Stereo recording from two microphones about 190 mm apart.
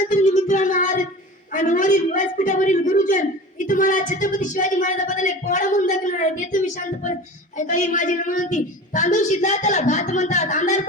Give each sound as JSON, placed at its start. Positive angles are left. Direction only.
{"t": 0.1, "sound": "music", "side_deg": 40}
{"t": 1.5, "sound": "speech", "side_deg": 40}